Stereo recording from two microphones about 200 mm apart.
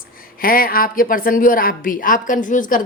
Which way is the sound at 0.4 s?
45° left (ahead or behind).